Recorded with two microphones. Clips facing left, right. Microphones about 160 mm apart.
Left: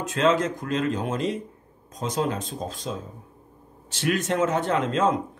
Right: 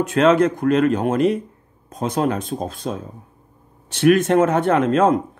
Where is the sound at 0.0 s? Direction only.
65° right (ahead or behind).